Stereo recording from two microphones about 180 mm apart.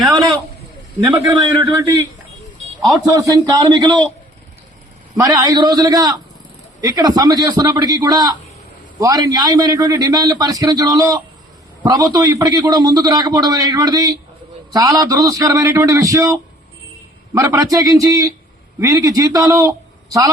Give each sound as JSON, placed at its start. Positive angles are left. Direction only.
{"t": 1.0, "sound": "a man's voice", "side_deg": -20}
{"t": 3.1, "sound": "a man's voice", "side_deg": -20}
{"t": 5.1, "sound": "a man's voice", "side_deg": -20}